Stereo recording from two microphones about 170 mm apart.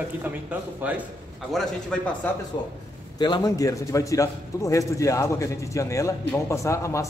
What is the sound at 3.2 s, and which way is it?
A man's voice, 25° left (ahead or behind).